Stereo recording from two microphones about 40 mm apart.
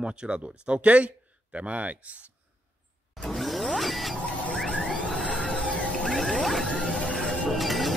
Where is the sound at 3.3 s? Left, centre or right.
Centre.